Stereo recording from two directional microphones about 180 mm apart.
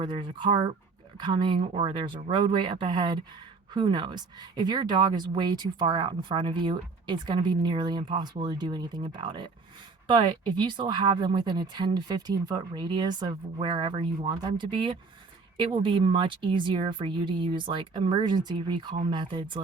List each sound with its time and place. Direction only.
0.0 s speech: 25° right (ahead or behind)